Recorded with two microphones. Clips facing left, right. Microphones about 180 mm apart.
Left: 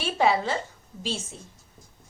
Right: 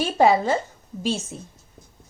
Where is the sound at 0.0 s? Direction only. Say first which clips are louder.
Right 5 dB; 45° right (ahead or behind).